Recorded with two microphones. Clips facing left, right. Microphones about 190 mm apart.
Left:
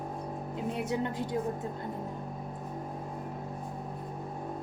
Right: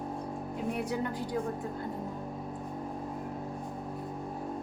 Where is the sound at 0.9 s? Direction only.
25° left (ahead or behind).